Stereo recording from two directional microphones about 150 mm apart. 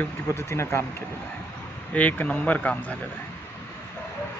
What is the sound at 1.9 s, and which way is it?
Speech, 10° left (ahead or behind).